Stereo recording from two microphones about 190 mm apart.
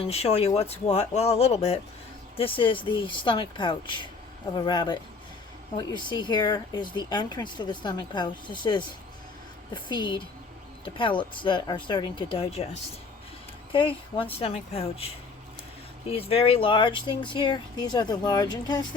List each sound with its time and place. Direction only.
0.0 s speech: 35° left (ahead or behind)